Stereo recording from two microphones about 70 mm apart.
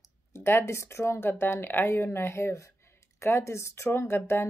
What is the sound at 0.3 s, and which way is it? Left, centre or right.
A woman's voice, left.